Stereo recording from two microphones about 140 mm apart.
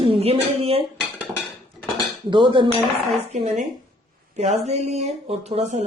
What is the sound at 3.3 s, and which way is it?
A woman's voice, 55° right (ahead or behind).